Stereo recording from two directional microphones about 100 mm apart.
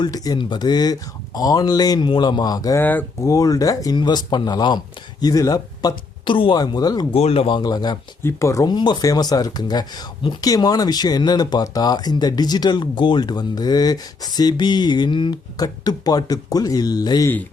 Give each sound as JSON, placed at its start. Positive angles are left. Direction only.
{"t": 0.0, "sound": "speech", "side_deg": 45}
{"t": 2.7, "sound": "speech", "side_deg": 20}
{"t": 3.2, "sound": "speech", "side_deg": 35}
{"t": 3.9, "sound": "speech", "side_deg": 45}
{"t": 6.2, "sound": "speech", "side_deg": 55}
{"t": 6.6, "sound": "speech", "side_deg": 40}
{"t": 7.1, "sound": "speech", "side_deg": 80}
{"t": 7.6, "sound": "speech", "side_deg": 40}
{"t": 8.2, "sound": "speech", "side_deg": 30}
{"t": 8.6, "sound": "speech", "side_deg": 45}